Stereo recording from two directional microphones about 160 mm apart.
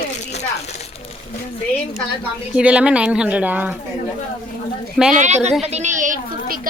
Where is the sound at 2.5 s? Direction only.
5° right (ahead or behind).